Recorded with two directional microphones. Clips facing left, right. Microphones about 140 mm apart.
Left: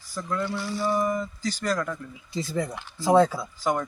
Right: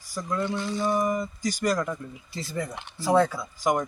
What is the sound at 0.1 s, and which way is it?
Speech, 15° right (ahead or behind).